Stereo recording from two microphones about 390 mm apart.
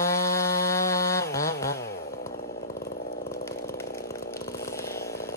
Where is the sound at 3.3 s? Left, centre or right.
Centre.